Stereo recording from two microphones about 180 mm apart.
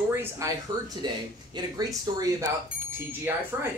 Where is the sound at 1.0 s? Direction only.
25° right (ahead or behind).